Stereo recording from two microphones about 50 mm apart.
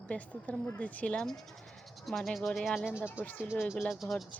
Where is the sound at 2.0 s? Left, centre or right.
Centre.